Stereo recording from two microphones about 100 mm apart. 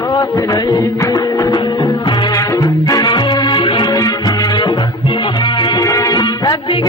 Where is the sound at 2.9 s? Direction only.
50° left (ahead or behind).